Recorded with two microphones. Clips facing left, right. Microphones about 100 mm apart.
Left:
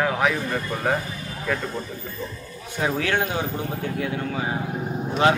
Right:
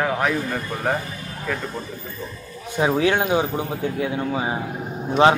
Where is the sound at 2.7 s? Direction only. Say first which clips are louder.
Right 5 dB; 20° right (ahead or behind).